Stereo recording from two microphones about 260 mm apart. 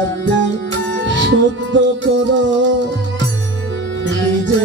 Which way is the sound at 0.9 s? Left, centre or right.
Right.